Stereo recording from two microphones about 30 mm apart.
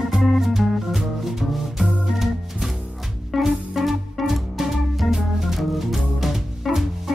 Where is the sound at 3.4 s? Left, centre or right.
Centre.